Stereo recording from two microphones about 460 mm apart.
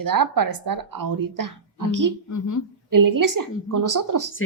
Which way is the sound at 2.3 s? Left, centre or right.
Left.